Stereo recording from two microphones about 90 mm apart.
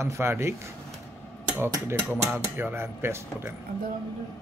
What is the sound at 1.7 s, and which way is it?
A man's voice, 30° right (ahead or behind).